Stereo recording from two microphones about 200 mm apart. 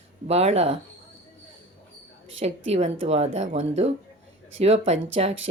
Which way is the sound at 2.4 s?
30° right (ahead or behind).